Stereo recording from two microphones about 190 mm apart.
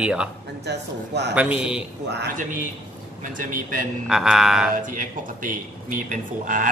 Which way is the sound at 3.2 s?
45° right (ahead or behind).